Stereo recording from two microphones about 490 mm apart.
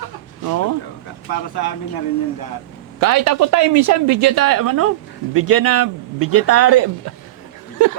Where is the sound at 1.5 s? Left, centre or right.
Left.